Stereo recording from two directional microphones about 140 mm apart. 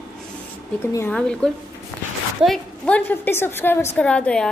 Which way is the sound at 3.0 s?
15° left (ahead or behind).